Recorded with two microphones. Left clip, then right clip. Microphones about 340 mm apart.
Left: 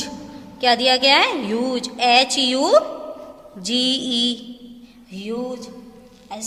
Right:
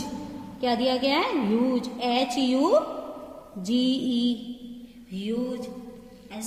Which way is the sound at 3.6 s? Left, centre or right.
Left.